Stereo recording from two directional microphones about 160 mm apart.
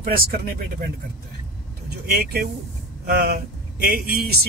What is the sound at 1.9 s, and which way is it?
Speech, 85° right.